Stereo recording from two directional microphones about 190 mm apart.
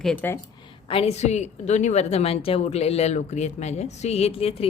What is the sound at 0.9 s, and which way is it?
A woman's voice, 30° left (ahead or behind).